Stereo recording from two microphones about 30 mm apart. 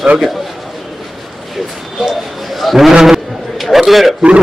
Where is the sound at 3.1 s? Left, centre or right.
Centre.